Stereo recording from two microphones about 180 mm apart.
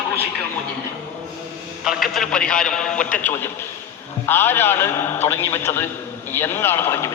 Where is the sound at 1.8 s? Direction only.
Centre (ahead or behind).